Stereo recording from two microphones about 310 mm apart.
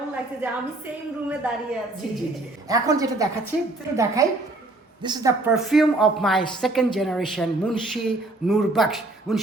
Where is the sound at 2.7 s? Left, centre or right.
Centre.